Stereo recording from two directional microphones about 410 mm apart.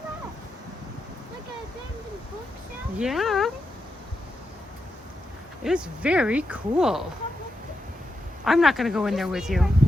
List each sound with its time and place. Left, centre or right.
3.0 s speech: centre
5.6 s speech: centre
8.4 s speech: centre